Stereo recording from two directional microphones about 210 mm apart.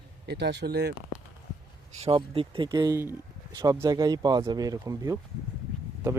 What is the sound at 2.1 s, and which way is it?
A man's voice, 25° right (ahead or behind).